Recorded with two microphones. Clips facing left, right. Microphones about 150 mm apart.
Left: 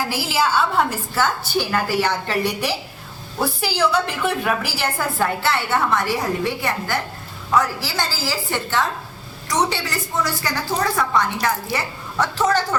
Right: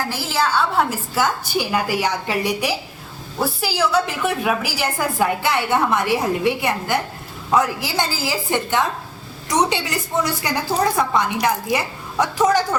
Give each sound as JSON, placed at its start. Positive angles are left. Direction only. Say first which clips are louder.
{"t": 0.1, "sound": "a woman's voice", "louder": "left 1 dB", "side_deg": 10}
{"t": 0.9, "sound": "a woman's voice", "louder": "right 1 dB", "side_deg": -10}